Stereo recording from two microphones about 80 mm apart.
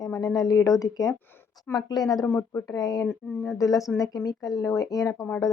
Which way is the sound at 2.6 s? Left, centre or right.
Left.